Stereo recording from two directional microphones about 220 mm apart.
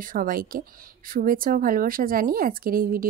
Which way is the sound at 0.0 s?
40° right (ahead or behind).